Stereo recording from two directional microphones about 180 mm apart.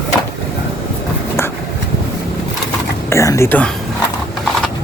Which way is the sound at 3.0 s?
15° left (ahead or behind).